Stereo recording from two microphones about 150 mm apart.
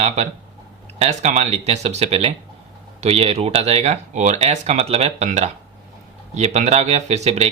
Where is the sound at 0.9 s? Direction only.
45° right (ahead or behind).